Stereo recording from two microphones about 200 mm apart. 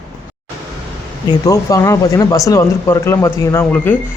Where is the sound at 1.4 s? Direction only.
15° left (ahead or behind).